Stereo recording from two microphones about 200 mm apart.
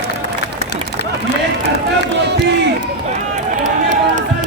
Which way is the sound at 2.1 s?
60° right (ahead or behind).